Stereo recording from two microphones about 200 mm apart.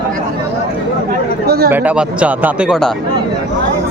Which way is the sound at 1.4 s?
50° right (ahead or behind).